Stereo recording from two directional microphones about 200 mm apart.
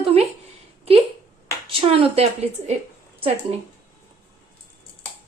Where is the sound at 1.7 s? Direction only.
25° right (ahead or behind).